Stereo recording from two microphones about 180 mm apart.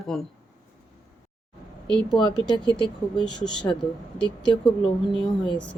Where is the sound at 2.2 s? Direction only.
25° left (ahead or behind).